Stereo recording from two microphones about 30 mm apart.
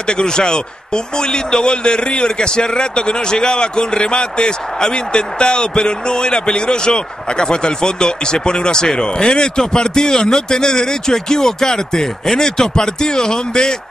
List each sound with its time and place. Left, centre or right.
0.0 s a man's voice: left